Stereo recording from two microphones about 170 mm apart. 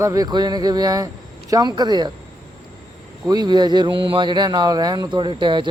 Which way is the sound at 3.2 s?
25° right (ahead or behind).